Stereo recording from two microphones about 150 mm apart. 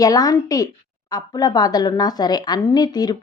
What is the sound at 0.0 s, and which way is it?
A woman's voice, 25° left (ahead or behind).